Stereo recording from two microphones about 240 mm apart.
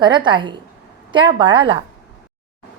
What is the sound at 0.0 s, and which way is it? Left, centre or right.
A woman's voice, centre.